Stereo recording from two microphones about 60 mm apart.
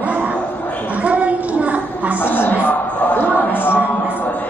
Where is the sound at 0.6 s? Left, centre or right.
Left.